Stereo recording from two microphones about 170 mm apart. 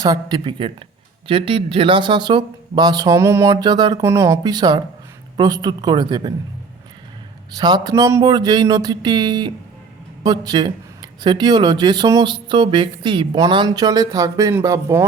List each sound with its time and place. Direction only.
0.0 s speech: 25° right (ahead or behind)
7.5 s speech: 25° right (ahead or behind)